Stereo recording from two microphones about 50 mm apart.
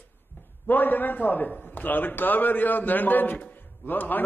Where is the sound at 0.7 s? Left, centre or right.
Left.